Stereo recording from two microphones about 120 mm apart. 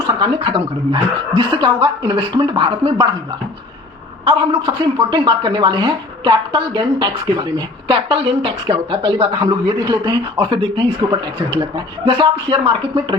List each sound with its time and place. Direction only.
0.3 s a woman's voice: 50° right (ahead or behind)
4.3 s speech: 40° right (ahead or behind)
7.9 s a woman's voice: 50° right (ahead or behind); by 10.4 s 30° right (ahead or behind)
10.5 s a woman's voice: 45° right (ahead or behind)